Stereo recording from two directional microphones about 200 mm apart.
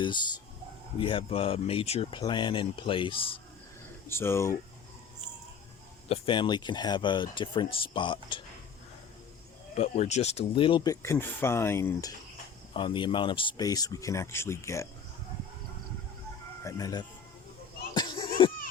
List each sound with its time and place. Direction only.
0.9 s speech: 25° left (ahead or behind)
4.1 s speech: 10° left (ahead or behind)
6.1 s speech: 25° left (ahead or behind)
9.7 s speech: 30° left (ahead or behind); by 14.8 s 15° left (ahead or behind)
16.6 s speech: 15° left (ahead or behind)
17.9 s a sound: 25° left (ahead or behind)